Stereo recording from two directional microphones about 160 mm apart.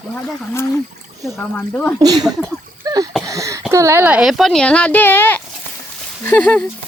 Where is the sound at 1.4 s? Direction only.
10° left (ahead or behind).